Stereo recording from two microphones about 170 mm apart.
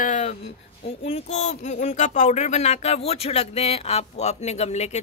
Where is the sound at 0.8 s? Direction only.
40° left (ahead or behind).